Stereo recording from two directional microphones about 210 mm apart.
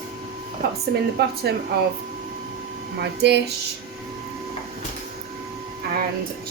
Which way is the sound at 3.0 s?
55° right (ahead or behind).